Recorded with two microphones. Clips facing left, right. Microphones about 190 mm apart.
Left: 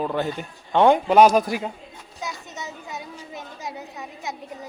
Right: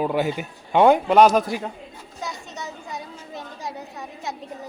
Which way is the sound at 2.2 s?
Centre (ahead or behind).